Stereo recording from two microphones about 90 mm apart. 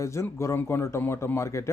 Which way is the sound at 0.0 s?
30° left (ahead or behind).